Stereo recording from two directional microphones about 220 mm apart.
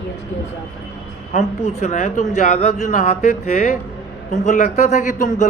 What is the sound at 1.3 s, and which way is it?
Speech, 30° left (ahead or behind).